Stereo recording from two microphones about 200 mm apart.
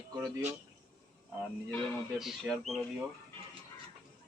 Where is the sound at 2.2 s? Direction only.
Centre (ahead or behind).